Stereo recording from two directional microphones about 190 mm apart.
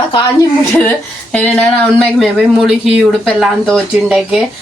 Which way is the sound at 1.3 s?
5° left (ahead or behind).